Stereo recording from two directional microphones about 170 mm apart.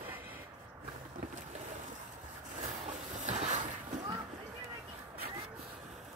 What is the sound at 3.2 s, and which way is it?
Boat, 40° right (ahead or behind).